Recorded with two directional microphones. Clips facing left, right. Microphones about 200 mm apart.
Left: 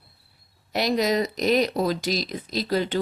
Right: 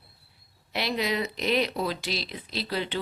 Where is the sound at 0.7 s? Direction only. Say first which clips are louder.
Left 6 dB; 40° left (ahead or behind).